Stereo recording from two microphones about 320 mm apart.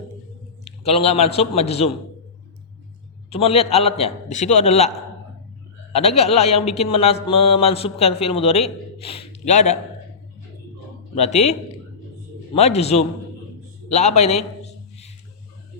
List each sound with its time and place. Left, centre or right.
0.9 s a man's voice: centre
3.2 s a man's voice: centre
5.9 s a man's voice: centre
11.1 s a man's voice: left
12.5 s a man's voice: centre